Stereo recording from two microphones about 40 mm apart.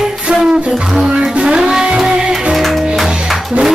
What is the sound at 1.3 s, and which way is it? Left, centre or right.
Music, right.